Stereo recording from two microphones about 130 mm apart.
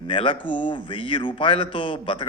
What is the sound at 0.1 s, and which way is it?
Speech, 40° left (ahead or behind).